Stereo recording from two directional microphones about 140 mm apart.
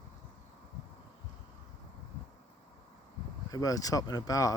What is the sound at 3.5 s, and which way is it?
Speech, 25° left (ahead or behind).